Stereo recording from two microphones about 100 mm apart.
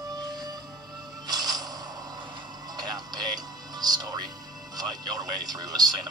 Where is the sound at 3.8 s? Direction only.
45° right (ahead or behind).